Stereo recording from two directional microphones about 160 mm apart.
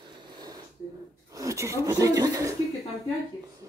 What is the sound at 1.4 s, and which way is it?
Speech, 20° right (ahead or behind).